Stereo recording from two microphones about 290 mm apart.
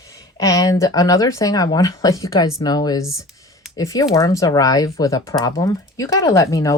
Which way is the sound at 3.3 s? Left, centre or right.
Centre.